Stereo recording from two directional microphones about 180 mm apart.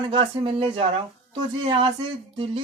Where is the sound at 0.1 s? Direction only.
30° right (ahead or behind).